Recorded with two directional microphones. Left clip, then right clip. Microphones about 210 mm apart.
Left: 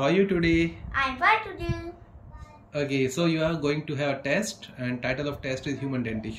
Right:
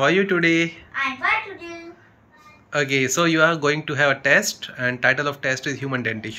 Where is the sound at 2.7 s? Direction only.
Centre (ahead or behind).